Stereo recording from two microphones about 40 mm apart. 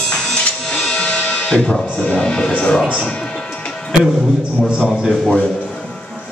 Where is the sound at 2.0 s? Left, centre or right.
Left.